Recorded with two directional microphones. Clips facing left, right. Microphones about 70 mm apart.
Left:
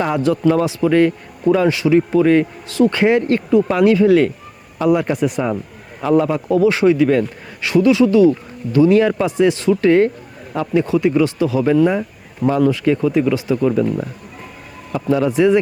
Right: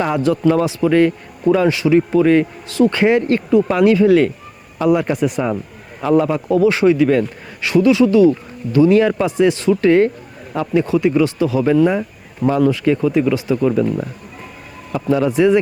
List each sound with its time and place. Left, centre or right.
0.0 s a man's voice: right